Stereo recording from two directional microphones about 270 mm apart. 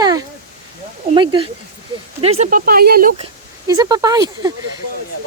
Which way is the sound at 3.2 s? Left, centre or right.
Centre.